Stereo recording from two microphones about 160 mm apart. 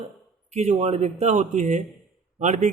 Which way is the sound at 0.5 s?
45° right (ahead or behind).